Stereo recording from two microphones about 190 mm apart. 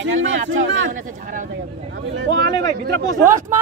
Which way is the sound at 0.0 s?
85° right.